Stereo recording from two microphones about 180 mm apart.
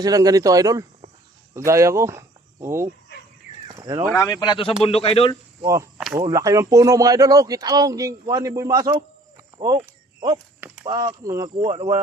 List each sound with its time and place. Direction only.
0.0 s speech: 20° right (ahead or behind)
3.7 s a sound: 20° right (ahead or behind)
4.2 s speech: 20° left (ahead or behind)
5.6 s speech: 15° right (ahead or behind)
9.6 s a sound: 20° right (ahead or behind)
10.8 s speech: 25° right (ahead or behind)